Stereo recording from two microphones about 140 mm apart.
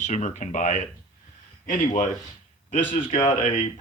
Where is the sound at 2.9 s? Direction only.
40° left (ahead or behind).